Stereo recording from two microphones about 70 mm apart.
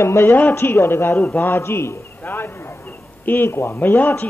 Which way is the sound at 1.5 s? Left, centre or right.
Left.